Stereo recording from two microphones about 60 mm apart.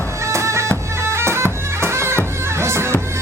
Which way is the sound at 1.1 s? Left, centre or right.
Right.